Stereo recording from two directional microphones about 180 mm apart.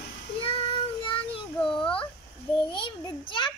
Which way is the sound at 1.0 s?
30° left (ahead or behind).